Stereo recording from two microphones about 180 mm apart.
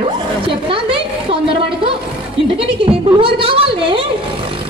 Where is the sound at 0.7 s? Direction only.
30° right (ahead or behind).